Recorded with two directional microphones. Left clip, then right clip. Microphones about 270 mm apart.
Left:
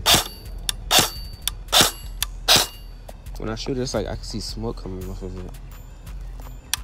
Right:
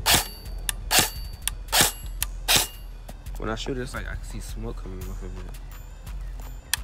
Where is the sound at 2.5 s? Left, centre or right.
Centre.